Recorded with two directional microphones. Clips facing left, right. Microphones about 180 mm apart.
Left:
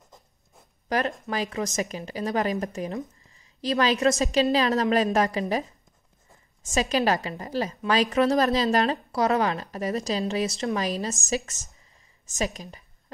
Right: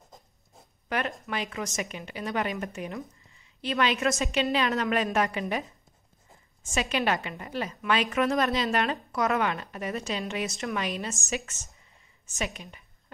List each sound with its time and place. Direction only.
0.8 s a woman's voice: 35° left (ahead or behind)